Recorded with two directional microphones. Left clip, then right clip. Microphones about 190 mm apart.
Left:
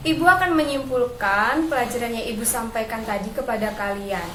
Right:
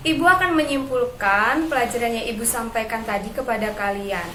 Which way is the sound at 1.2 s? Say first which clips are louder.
Right 3 dB; 10° right (ahead or behind).